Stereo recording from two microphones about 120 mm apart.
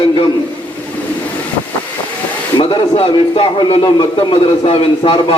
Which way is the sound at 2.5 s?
45° left (ahead or behind).